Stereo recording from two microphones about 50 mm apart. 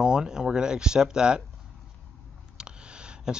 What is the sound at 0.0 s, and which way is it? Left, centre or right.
Speech, centre.